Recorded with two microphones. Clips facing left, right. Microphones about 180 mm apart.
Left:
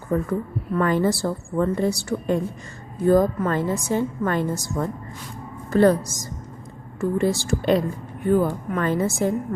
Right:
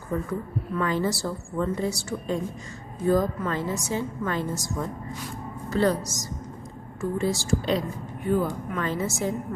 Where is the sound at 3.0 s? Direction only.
50° left (ahead or behind).